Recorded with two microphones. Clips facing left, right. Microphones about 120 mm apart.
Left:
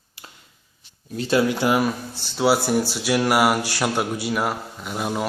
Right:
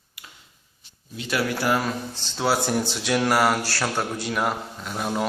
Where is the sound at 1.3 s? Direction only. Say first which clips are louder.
Left 4 dB; 20° left (ahead or behind).